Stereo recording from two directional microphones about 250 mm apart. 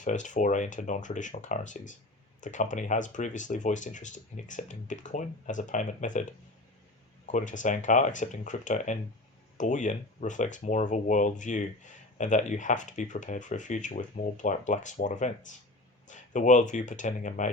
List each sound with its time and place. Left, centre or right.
0.0 s speech: left
7.3 s speech: left